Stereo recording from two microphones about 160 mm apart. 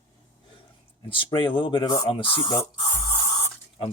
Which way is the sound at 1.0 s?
35° left (ahead or behind).